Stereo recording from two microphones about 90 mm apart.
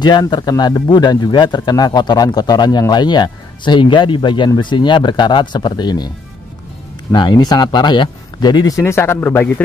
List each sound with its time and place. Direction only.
0.0 s speech: 55° left (ahead or behind)
7.2 s speech: 55° left (ahead or behind)
8.8 s a man's voice: 30° left (ahead or behind)